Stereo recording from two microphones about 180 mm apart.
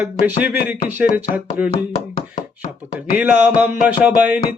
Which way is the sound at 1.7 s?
30° left (ahead or behind).